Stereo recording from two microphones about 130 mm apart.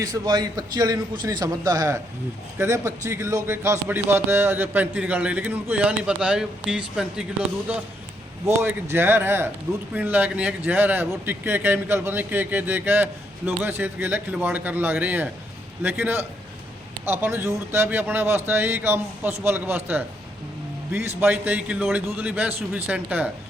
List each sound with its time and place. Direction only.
0.0 s a man's voice: 30° right (ahead or behind); by 7.3 s 5° right (ahead or behind)
8.4 s a man's voice: 20° right (ahead or behind)